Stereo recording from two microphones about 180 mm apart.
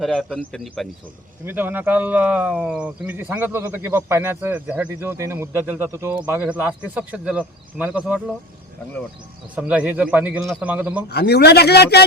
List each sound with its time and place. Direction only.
0.0 s speech: centre (ahead or behind)
1.5 s speech: 10° right (ahead or behind)
9.6 s speech: 5° right (ahead or behind)
11.1 s a man's voice: 65° left (ahead or behind)